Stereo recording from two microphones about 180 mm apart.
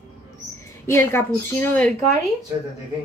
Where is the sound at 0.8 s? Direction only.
15° left (ahead or behind).